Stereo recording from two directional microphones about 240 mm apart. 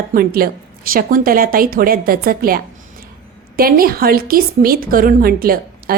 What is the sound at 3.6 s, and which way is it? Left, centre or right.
A woman's voice, right.